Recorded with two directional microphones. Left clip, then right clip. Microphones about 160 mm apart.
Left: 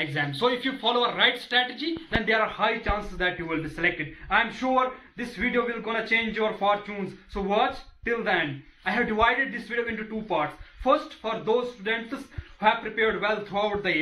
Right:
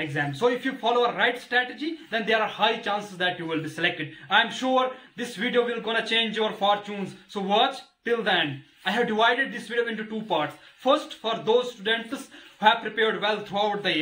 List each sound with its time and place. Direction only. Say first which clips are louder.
0.0 s a man's voice: right 1 dB; 15° right (ahead or behind)